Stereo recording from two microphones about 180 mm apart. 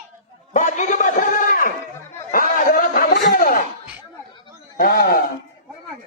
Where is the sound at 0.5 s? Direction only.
45° left (ahead or behind).